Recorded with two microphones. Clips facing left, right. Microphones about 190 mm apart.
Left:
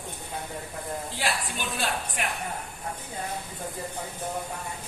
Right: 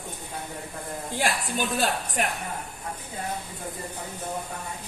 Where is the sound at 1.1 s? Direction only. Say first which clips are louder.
Right 6 dB; 45° right (ahead or behind).